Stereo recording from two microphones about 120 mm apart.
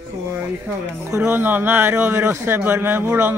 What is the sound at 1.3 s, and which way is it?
A man's voice, 15° right (ahead or behind).